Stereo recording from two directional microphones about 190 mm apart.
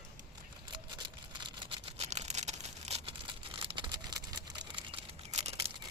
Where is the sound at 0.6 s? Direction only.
25° right (ahead or behind).